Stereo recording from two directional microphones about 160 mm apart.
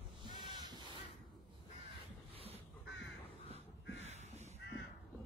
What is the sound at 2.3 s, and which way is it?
Duck, 40° right (ahead or behind).